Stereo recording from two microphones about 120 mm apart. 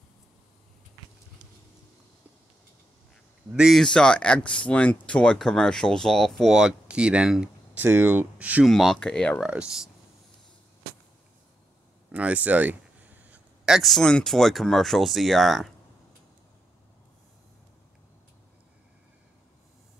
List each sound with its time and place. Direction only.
3.5 s speech: 5° right (ahead or behind)
3.8 s speech: 5° left (ahead or behind)
7.8 s speech: 15° right (ahead or behind)
8.6 s speech: centre (ahead or behind)
9.4 s speech: 5° right (ahead or behind)
12.1 s speech: 10° right (ahead or behind)